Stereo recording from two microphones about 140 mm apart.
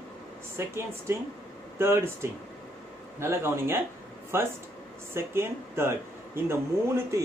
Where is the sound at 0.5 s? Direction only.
20° right (ahead or behind).